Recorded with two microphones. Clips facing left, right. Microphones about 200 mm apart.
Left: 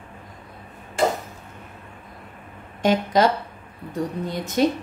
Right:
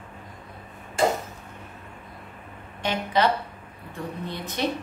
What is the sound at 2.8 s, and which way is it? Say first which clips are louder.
Speech: left 5 dB; 45° left (ahead or behind).